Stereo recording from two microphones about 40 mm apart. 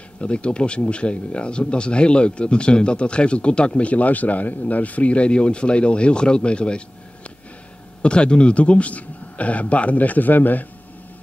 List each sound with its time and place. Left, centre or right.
0.2 s speech: left
8.0 s speech: left